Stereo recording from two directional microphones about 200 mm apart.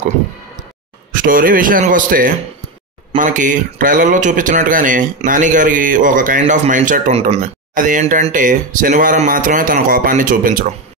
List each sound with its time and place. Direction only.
1.1 s a man's voice: 45° right (ahead or behind)